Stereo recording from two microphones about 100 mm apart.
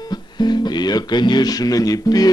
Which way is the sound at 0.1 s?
45° left (ahead or behind).